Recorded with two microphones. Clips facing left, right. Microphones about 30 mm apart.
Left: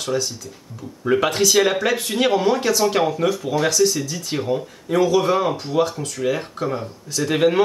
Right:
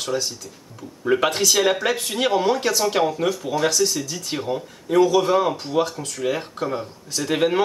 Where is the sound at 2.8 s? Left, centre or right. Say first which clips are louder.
Left 2 dB; centre.